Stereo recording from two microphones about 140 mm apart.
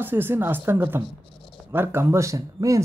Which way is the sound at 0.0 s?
15° right (ahead or behind).